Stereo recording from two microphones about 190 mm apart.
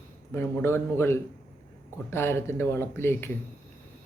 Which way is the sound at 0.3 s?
15° left (ahead or behind).